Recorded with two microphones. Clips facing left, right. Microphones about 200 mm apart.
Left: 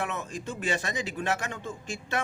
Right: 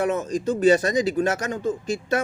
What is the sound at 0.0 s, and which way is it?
Speech, 40° right (ahead or behind).